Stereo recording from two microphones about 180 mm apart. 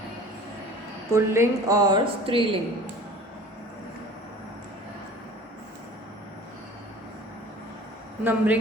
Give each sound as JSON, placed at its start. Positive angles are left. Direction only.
{"t": 1.1, "sound": "speech", "side_deg": -15}
{"t": 8.2, "sound": "speech", "side_deg": -10}